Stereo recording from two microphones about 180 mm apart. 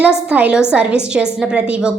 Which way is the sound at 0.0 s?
5° right (ahead or behind).